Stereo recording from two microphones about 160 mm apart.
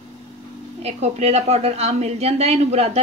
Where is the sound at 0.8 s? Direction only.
40° right (ahead or behind).